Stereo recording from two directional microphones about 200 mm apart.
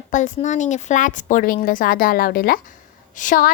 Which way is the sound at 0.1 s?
40° left (ahead or behind).